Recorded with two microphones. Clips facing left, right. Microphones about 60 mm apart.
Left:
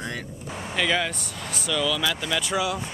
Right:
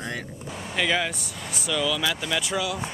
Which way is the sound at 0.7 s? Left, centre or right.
Centre.